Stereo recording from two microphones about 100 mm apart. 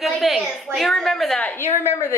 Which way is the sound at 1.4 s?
15° left (ahead or behind).